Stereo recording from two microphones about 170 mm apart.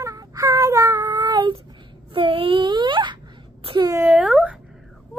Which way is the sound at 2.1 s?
30° right (ahead or behind).